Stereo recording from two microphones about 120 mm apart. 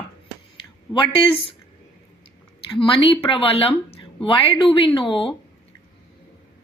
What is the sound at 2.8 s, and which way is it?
Speech, 45° left (ahead or behind).